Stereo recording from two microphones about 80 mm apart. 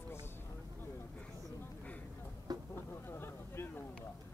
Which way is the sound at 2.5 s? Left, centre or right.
Right.